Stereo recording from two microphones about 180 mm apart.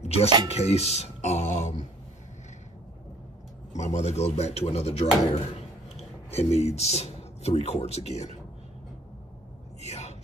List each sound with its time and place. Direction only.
0.0 s speech: 35° left (ahead or behind)
3.7 s speech: 40° left (ahead or behind)
9.8 s a sound: 40° left (ahead or behind)